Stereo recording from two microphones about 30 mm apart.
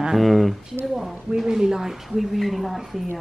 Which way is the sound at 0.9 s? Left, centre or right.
Centre.